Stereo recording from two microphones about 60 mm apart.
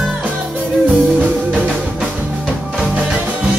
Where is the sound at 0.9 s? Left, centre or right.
Centre.